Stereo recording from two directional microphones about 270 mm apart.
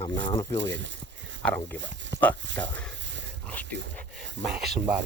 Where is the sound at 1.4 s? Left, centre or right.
Centre.